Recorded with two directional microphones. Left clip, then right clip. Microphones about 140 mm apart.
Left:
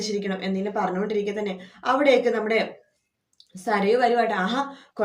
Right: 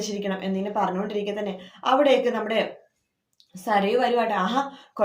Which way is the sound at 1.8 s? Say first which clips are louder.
Even; 15° right (ahead or behind).